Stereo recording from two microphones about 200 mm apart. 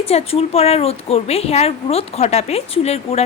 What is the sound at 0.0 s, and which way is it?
A woman's voice, 30° left (ahead or behind).